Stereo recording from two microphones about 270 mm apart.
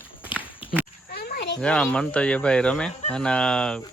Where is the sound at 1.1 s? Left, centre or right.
Left.